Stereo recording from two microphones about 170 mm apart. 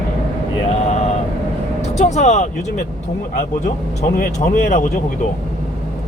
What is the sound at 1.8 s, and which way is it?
Speech, 40° left (ahead or behind).